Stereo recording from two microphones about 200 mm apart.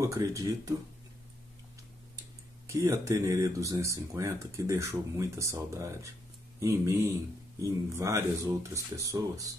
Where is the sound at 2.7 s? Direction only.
15° right (ahead or behind).